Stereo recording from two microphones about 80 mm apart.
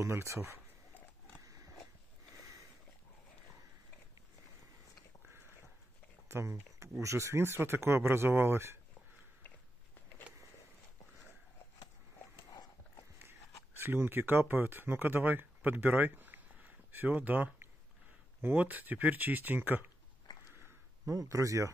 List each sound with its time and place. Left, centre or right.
0.0 s speech: right
6.2 s speech: right
13.7 s speech: right
20.6 s a sound: right